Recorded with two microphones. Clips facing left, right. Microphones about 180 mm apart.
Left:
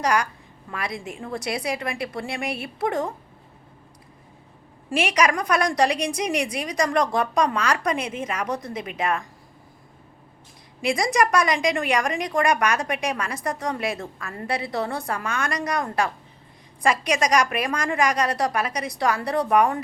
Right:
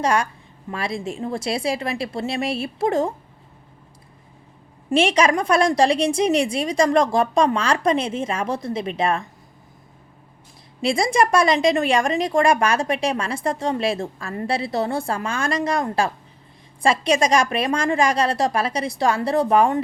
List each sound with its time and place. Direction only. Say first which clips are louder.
0.0 s a woman's voice: right 2 dB; 25° right (ahead or behind)
4.9 s a woman's voice: right 4 dB; 25° right (ahead or behind)
10.8 s a woman's voice: right 3 dB; 25° right (ahead or behind)